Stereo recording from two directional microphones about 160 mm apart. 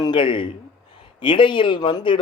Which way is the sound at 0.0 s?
30° left (ahead or behind).